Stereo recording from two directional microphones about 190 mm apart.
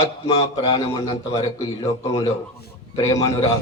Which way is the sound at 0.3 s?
25° left (ahead or behind).